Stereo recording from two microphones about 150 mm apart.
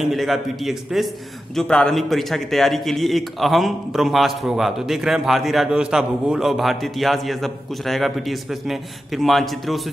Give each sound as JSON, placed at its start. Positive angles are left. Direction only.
{"t": 0.0, "sound": "a man's voice", "side_deg": 0}